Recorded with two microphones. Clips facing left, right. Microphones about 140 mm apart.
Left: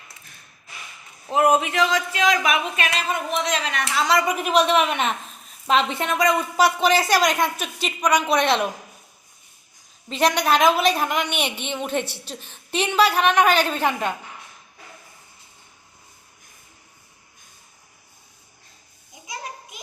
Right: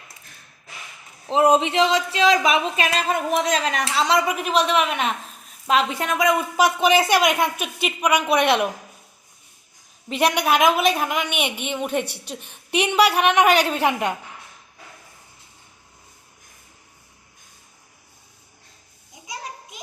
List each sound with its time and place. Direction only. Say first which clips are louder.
1.3 s speech: right 2 dB; 25° right (ahead or behind)
4.2 s speech: left 1 dB; 5° right (ahead or behind)
7.2 s speech: right 1 dB; 5° right (ahead or behind)
10.1 s speech: even; 10° right (ahead or behind)
12.0 s a woman's voice: even; 55° right (ahead or behind)
12.3 s a woman's voice: right 3 dB; 15° right (ahead or behind)